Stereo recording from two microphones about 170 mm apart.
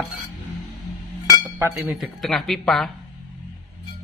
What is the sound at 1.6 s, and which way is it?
Speech, 10° right (ahead or behind).